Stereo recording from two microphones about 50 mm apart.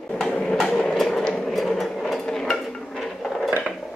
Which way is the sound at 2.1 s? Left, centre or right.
Centre.